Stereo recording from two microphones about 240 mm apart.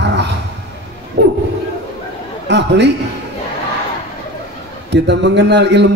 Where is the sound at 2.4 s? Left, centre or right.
Right.